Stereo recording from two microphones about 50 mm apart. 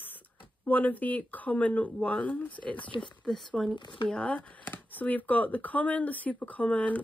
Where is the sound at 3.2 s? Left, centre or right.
Centre.